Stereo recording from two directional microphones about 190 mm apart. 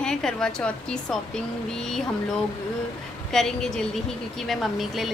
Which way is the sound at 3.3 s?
Centre (ahead or behind).